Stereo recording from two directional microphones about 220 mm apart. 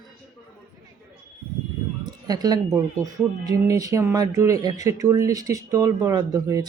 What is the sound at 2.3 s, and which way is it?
Speech, 15° right (ahead or behind).